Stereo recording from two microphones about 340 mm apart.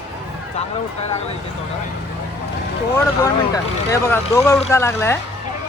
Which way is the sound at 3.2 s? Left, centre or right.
Centre.